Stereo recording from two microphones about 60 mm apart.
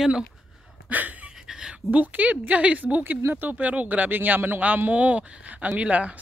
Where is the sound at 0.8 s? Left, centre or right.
Right.